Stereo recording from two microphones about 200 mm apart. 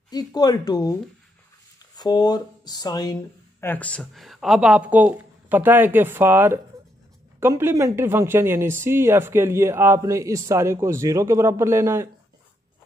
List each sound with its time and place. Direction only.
0.1 s speech: 20° left (ahead or behind)
2.0 s speech: 20° left (ahead or behind)
3.6 s speech: 10° left (ahead or behind); by 12.1 s 15° right (ahead or behind)